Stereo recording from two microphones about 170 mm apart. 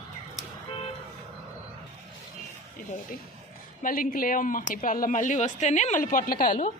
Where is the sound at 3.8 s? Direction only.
55° left (ahead or behind).